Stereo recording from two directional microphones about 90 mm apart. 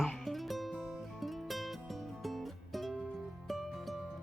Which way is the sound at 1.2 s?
Centre (ahead or behind).